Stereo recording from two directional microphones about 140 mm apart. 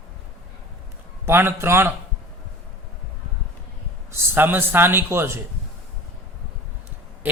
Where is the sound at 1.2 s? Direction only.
15° right (ahead or behind).